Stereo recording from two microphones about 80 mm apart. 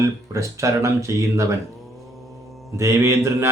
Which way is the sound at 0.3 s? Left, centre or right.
Right.